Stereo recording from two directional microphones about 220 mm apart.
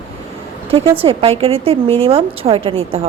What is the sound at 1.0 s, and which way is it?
A woman's voice, 25° right (ahead or behind).